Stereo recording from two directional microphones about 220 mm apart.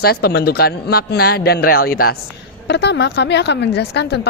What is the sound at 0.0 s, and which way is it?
Speech, 45° left (ahead or behind).